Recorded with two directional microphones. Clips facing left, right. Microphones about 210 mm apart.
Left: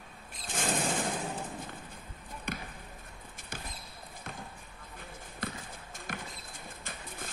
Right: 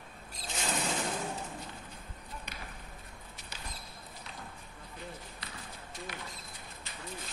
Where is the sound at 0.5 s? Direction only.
50° left (ahead or behind).